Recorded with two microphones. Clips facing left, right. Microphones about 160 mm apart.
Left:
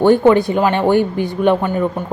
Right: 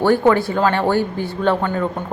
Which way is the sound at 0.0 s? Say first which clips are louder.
Left 4 dB; 20° left (ahead or behind).